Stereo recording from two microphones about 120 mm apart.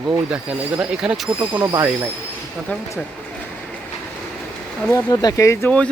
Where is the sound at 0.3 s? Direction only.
5° right (ahead or behind).